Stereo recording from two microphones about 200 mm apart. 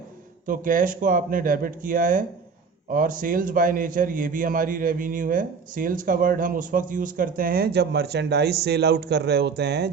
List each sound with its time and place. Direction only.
0.4 s a man's voice: 40° right (ahead or behind)